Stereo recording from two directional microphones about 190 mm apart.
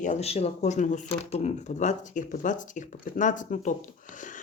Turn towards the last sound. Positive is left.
turn(degrees=45)  # may be behind; listen again after turning